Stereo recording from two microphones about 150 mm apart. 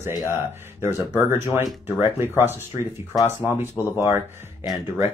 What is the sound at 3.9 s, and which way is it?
Speech, 15° right (ahead or behind).